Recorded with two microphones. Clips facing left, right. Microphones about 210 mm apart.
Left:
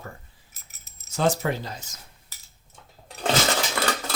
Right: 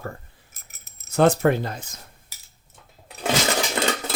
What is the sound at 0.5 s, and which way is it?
Keys jangling, 60° right (ahead or behind).